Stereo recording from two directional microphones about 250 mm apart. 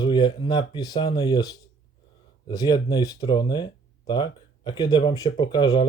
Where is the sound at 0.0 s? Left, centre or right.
Centre.